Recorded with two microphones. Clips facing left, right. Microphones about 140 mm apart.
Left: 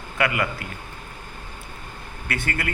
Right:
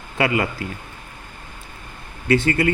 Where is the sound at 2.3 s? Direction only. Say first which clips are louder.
Right 11 dB; 25° right (ahead or behind).